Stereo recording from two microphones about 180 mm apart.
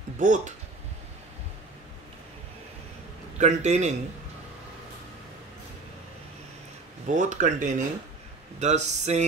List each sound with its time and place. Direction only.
0.2 s speech: 45° right (ahead or behind)
3.3 s speech: 40° right (ahead or behind)
7.1 s speech: 45° right (ahead or behind)